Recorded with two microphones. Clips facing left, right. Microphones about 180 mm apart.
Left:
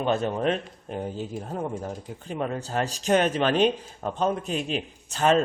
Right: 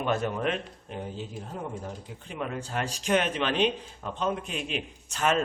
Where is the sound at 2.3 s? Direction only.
35° left (ahead or behind).